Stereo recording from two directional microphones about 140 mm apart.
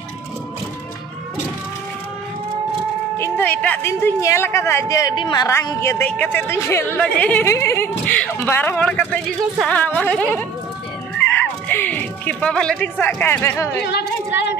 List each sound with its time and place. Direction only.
3.2 s speech: 10° left (ahead or behind); by 5.5 s 30° left (ahead or behind)
5.5 s speech: 20° left (ahead or behind)
11.1 s neigh: 15° left (ahead or behind)